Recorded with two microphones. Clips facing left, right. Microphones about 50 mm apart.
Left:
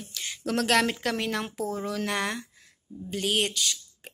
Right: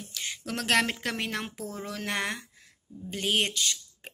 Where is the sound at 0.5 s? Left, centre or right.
Right.